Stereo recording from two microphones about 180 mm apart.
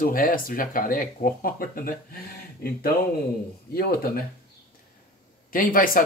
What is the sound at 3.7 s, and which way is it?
Speech, 55° left (ahead or behind).